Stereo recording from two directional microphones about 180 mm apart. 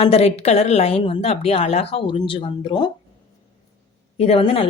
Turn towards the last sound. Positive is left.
turn(degrees=35)  # may be behind; listen again after turning